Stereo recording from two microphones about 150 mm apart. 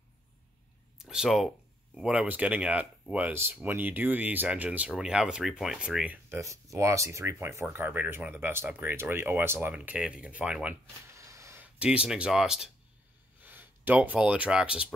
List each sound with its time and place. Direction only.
0.9 s speech: 5° right (ahead or behind)
11.1 s a sound: 20° right (ahead or behind); by 12.7 s 5° right (ahead or behind)
13.4 s speech: 10° right (ahead or behind)